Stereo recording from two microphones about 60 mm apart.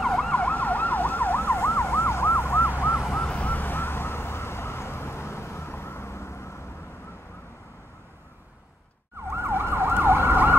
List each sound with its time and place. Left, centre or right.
0.0 s emergency vehicle: centre
0.4 s emergency vehicle: left
3.2 s emergency vehicle: left
9.3 s emergency vehicle: right